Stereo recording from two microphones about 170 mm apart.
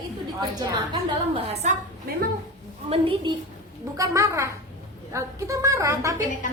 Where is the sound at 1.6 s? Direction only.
40° right (ahead or behind).